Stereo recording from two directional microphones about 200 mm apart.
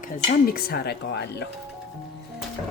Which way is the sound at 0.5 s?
50° left (ahead or behind).